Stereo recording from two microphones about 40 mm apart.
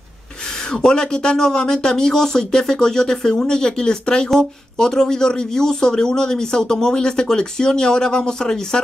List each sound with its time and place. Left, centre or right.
0.7 s speech: centre